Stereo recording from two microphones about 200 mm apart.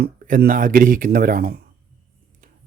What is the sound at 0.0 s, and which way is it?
A man's voice, 45° right (ahead or behind).